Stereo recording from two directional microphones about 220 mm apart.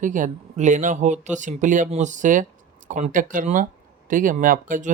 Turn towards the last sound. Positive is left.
turn(degrees=-35)  # may be behind; listen again after turning